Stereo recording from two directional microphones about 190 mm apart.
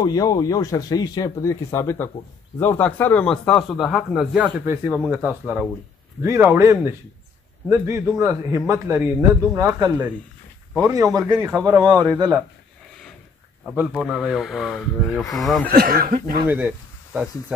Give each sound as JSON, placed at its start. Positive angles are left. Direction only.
{"t": 0.0, "sound": "a man's voice", "side_deg": 20}
{"t": 11.3, "sound": "a man's voice", "side_deg": -5}
{"t": 11.6, "sound": "speech", "side_deg": -20}
{"t": 13.7, "sound": "a man's voice", "side_deg": 0}
{"t": 15.7, "sound": "speech", "side_deg": -50}
{"t": 16.4, "sound": "speech", "side_deg": -5}